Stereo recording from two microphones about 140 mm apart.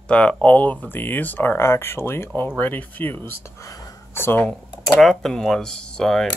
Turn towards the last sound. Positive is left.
turn(degrees=5)  # may be behind; listen again after turning